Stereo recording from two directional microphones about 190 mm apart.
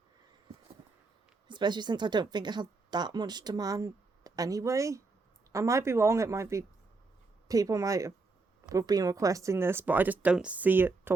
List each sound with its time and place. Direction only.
1.5 s speech: 25° right (ahead or behind)